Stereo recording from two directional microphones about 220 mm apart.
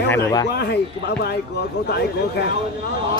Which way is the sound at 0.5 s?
45° left (ahead or behind).